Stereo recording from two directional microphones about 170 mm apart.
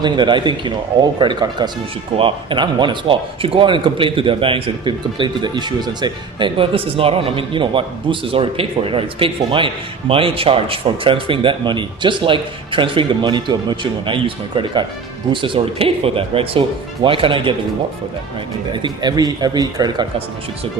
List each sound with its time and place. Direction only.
0.0 s speech: 25° right (ahead or behind)
18.7 s speech: 25° right (ahead or behind)